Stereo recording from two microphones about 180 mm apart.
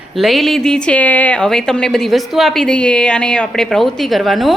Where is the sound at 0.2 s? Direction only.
Centre (ahead or behind).